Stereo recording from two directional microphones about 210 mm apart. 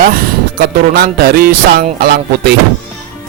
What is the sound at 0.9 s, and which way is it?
Speech, 45° right (ahead or behind).